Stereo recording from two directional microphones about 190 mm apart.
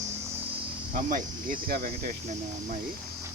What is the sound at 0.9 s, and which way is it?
Speech, 45° right (ahead or behind).